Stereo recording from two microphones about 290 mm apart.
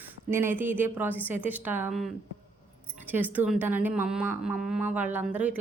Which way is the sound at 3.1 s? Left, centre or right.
Centre.